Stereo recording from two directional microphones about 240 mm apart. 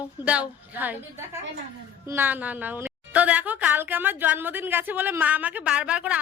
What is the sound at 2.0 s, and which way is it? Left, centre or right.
A woman's voice, centre.